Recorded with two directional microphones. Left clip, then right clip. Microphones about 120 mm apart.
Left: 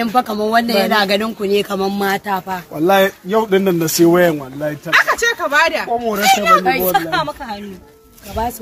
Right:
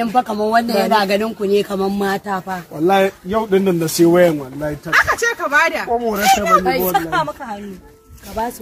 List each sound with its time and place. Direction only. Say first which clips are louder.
0.0 s speech: even; 10° right (ahead or behind)
2.9 s speech: left 2 dB; 50° left (ahead or behind)
4.8 s speech: left 1 dB; 5° left (ahead or behind)
5.9 s speech: even; 25° left (ahead or behind)
6.5 s speech: left 2 dB; 15° left (ahead or behind)
7.1 s speech: even; 5° right (ahead or behind)